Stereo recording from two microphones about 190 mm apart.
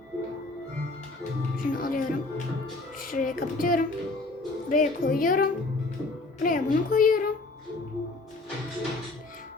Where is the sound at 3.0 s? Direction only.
45° left (ahead or behind).